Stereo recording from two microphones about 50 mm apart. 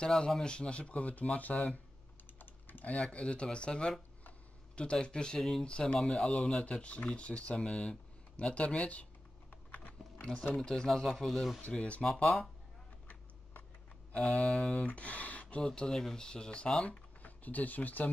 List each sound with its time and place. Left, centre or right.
0.0 s speech: centre
2.3 s typing: left
2.9 s speech: left
9.5 s a sound: left
10.5 s speech: centre
11.7 s speech: centre
14.3 s speech: centre
17.2 s speech: left